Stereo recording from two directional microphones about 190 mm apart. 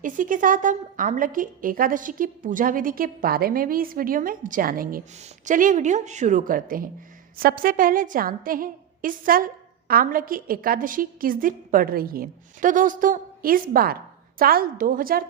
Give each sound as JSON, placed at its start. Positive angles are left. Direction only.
{"t": 0.0, "sound": "a woman's voice", "side_deg": -45}